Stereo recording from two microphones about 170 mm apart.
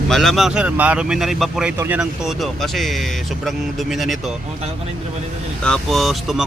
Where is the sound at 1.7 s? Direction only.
15° right (ahead or behind).